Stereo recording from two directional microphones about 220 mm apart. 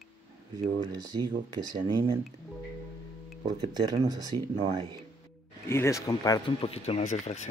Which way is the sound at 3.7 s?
15° right (ahead or behind).